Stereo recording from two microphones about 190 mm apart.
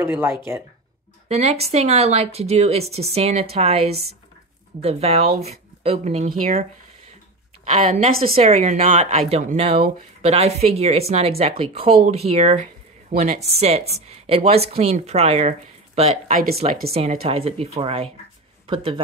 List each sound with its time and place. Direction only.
0.0 s speech: 10° right (ahead or behind)
1.3 s a woman's voice: 35° right (ahead or behind)
6.2 s speech: 45° right (ahead or behind)
7.7 s a woman's voice: 35° right (ahead or behind)